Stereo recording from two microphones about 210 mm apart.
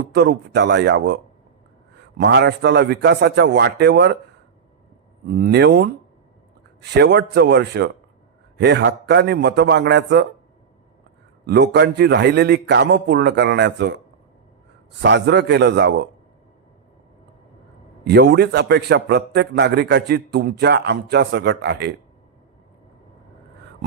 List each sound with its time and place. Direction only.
0.0 s a man's voice: 55° right (ahead or behind)
5.3 s a man's voice: 50° right (ahead or behind)
11.4 s a man's voice: 50° right (ahead or behind)
15.0 s a man's voice: 55° right (ahead or behind)
18.0 s a man's voice: 55° right (ahead or behind)